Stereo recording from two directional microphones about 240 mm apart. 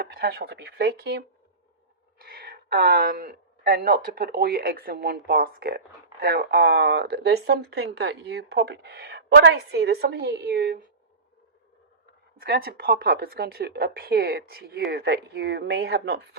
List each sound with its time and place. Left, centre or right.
0.0 s speech: right
12.4 s speech: right